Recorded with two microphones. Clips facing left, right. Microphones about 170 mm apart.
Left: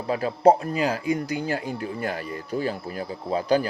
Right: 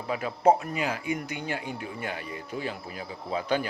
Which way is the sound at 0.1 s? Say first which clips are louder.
Left 4 dB; 35° left (ahead or behind).